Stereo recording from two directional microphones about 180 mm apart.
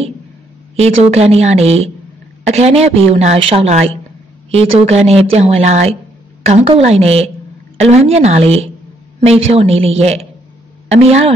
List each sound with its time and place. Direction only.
0.7 s a woman's voice: 35° right (ahead or behind)